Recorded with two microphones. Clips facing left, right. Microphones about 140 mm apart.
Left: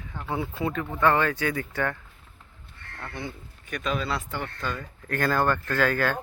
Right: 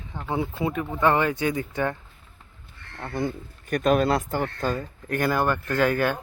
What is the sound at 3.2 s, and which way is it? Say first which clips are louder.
Speech: right 11 dB; 45° right (ahead or behind).